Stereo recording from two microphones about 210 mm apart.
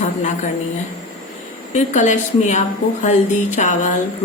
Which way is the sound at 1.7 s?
35° left (ahead or behind).